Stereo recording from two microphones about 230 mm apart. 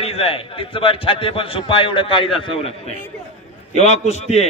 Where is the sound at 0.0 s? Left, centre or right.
Left.